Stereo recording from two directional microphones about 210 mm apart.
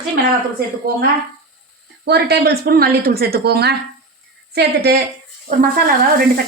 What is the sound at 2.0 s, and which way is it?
Speech, 50° right (ahead or behind).